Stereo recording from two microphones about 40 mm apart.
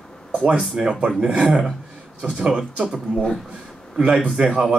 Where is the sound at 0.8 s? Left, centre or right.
Centre.